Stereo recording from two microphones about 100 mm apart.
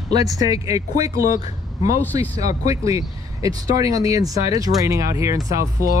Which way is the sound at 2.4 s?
35° right (ahead or behind).